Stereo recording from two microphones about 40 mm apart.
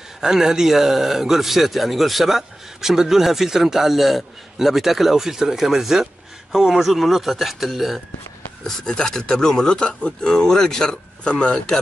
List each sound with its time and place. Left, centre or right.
0.2 s a man's voice: centre
8.6 s a man's voice: centre